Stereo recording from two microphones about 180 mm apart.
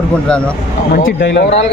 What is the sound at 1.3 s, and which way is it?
Speech, 75° left (ahead or behind).